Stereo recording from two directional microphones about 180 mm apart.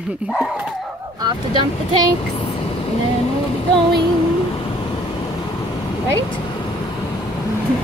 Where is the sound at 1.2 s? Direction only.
25° right (ahead or behind).